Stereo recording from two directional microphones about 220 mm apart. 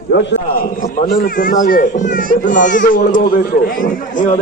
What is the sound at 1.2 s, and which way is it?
A child's voice, 40° left (ahead or behind).